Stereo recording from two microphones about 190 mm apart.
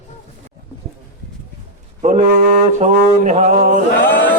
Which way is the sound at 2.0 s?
35° right (ahead or behind).